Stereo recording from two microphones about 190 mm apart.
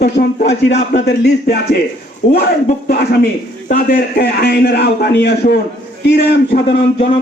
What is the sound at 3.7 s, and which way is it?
A man's voice, 50° left (ahead or behind).